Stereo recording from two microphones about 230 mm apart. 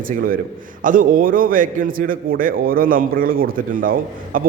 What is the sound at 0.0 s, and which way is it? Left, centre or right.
A man's voice, right.